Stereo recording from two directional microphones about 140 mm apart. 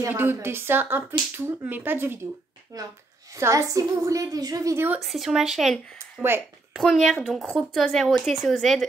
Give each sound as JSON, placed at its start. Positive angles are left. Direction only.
{"t": 0.0, "sound": "a woman's voice", "side_deg": -15}
{"t": 5.0, "sound": "speech", "side_deg": 0}